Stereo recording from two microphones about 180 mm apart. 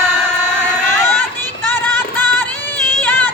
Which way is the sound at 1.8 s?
10° left (ahead or behind).